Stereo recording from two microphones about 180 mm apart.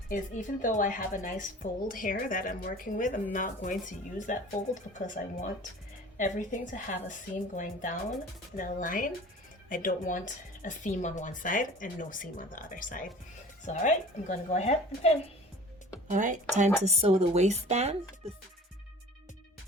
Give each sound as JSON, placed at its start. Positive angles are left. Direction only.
{"t": 0.1, "sound": "a woman's voice", "side_deg": 45}
{"t": 16.0, "sound": "speech", "side_deg": -45}